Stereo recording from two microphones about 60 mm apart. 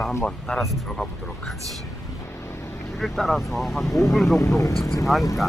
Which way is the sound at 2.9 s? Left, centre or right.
Centre.